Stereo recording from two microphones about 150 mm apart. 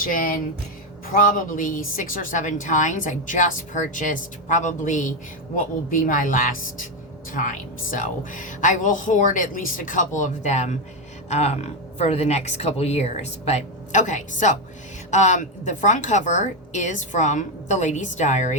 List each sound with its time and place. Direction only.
0.0 s a woman's voice: 70° left (ahead or behind); by 18.5 s 50° left (ahead or behind)